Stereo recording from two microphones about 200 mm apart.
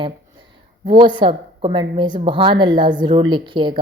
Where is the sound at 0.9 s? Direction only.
20° right (ahead or behind).